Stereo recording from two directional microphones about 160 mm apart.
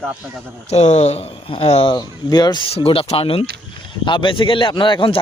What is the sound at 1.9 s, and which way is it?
Speech, 25° left (ahead or behind).